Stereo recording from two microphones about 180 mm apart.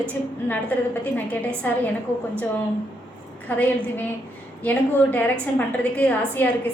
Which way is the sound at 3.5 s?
10° left (ahead or behind).